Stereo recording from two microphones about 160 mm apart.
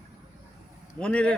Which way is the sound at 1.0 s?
5° left (ahead or behind).